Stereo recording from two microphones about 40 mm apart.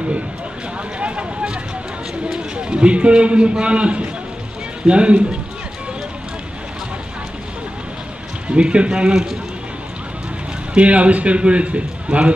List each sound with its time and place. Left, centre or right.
0.9 s a sound: right
2.3 s a man's voice: right
8.5 s a man's voice: right
10.7 s a man's voice: right